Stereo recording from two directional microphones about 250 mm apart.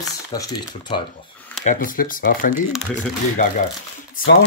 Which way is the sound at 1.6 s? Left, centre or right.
Left.